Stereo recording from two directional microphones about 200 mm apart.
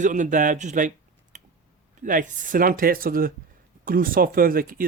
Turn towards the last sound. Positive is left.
turn(degrees=-45)  # may be behind; listen again after turning